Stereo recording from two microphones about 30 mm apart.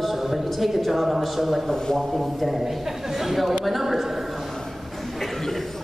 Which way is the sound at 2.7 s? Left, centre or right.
Centre.